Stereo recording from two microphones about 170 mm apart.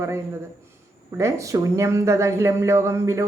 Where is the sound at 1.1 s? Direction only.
15° right (ahead or behind).